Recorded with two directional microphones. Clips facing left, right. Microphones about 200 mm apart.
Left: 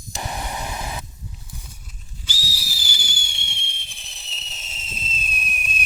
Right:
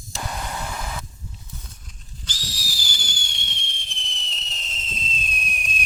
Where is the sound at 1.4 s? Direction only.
10° left (ahead or behind).